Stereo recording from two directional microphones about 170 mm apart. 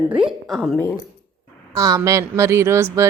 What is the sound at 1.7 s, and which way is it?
A woman's voice, 20° right (ahead or behind).